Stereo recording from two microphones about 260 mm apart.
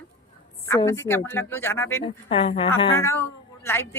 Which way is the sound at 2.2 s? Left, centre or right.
Left.